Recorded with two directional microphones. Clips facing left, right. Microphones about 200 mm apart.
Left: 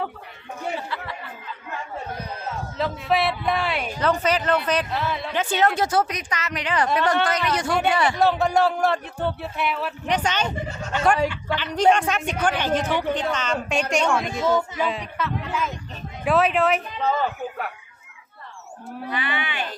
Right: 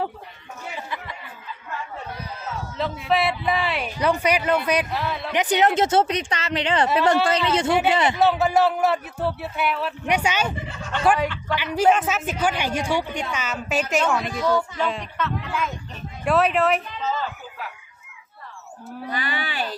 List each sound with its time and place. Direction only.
0.9 s chatter: 15° right (ahead or behind)
2.7 s speech: centre (ahead or behind)
4.0 s a woman's voice: 10° right (ahead or behind)
4.9 s speech: centre (ahead or behind)
5.3 s a woman's voice: 15° right (ahead or behind)
8.2 s a woman's voice: centre (ahead or behind)
11.5 s a woman's voice: 10° right (ahead or behind)
14.3 s speech: 20° left (ahead or behind)
14.8 s speech: centre (ahead or behind)
17.0 s a sound: 60° left (ahead or behind)
19.1 s speech: 40° right (ahead or behind)